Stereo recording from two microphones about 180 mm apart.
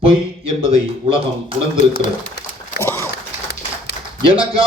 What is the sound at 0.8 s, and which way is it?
Speech, 30° right (ahead or behind).